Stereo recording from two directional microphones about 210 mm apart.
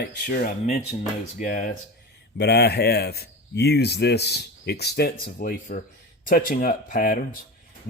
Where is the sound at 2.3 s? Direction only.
50° left (ahead or behind).